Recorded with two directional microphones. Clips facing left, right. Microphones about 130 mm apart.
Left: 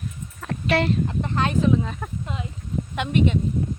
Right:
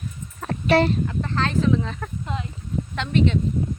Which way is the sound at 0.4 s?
35° right (ahead or behind).